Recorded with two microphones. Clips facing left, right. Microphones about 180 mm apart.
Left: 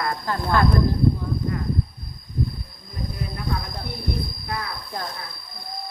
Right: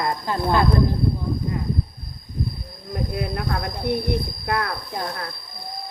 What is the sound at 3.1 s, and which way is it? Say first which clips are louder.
Speech: right 2 dB; 65° right (ahead or behind).